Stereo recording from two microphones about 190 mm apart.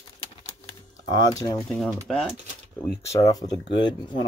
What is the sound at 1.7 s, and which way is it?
Speech, centre (ahead or behind).